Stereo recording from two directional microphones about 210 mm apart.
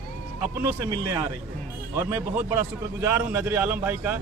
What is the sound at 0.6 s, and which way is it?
Speech, 15° right (ahead or behind).